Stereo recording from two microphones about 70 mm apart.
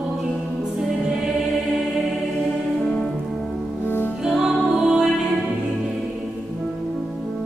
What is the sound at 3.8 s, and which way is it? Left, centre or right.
Music, left.